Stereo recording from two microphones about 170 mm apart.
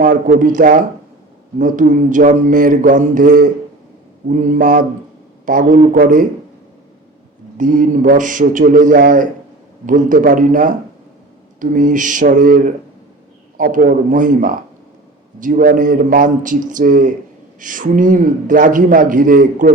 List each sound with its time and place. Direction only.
0.0 s a man's voice: 50° right (ahead or behind)
7.6 s a man's voice: 50° right (ahead or behind)